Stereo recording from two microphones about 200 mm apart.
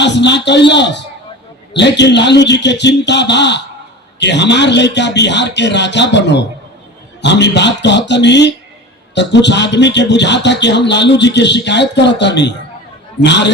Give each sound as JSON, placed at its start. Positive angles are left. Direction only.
{"t": 0.0, "sound": "speech", "side_deg": 60}